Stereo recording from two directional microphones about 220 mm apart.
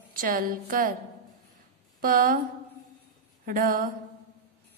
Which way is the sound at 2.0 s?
40° right (ahead or behind).